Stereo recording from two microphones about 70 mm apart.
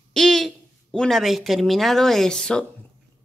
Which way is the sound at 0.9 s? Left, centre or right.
Centre.